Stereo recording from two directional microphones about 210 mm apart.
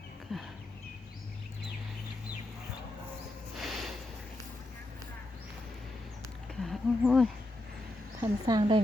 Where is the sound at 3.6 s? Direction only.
Centre (ahead or behind).